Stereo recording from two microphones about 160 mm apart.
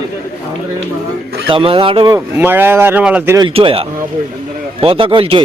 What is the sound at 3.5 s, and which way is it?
Speech, 35° right (ahead or behind).